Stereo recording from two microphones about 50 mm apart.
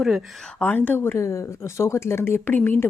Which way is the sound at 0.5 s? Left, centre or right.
Left.